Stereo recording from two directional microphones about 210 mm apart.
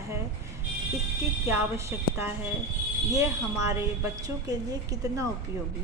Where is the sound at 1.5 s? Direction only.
10° right (ahead or behind).